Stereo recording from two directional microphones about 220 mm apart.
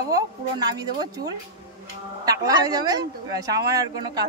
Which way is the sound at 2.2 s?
15° right (ahead or behind).